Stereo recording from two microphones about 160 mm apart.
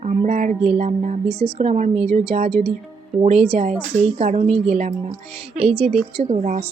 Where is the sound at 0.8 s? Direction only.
50° right (ahead or behind).